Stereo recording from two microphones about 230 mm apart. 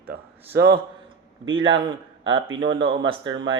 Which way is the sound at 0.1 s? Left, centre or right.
Right.